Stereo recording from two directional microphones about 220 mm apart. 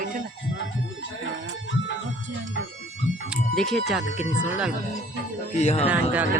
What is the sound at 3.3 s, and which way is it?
Speech, centre (ahead or behind).